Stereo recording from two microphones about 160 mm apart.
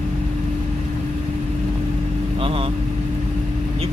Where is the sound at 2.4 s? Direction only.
35° right (ahead or behind).